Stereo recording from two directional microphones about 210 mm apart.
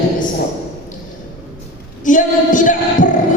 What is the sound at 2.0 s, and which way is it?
A man's voice, 40° left (ahead or behind).